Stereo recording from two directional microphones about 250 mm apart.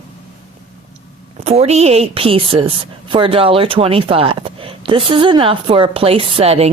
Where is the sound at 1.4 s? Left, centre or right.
Right.